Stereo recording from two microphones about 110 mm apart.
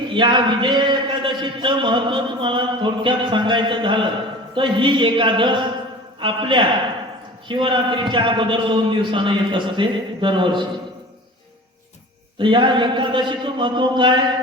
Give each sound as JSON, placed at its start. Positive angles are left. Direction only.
{"t": 0.1, "sound": "a man's voice", "side_deg": -50}
{"t": 12.4, "sound": "a man's voice", "side_deg": -50}